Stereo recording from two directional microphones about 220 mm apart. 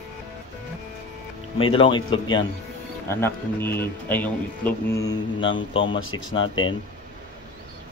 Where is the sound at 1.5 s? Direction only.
25° left (ahead or behind).